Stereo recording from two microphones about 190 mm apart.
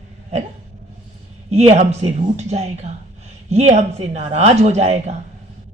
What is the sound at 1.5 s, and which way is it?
Speech, 35° right (ahead or behind).